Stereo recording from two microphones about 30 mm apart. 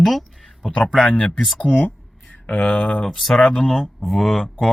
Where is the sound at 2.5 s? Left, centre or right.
Left.